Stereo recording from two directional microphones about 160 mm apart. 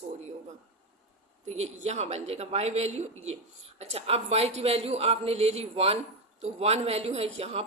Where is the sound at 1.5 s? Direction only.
45° right (ahead or behind).